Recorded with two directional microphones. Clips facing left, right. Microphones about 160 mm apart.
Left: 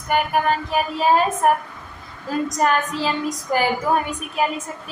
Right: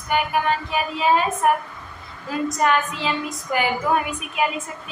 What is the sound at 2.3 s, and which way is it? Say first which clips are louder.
A woman's voice: left 1 dB; 40° left (ahead or behind).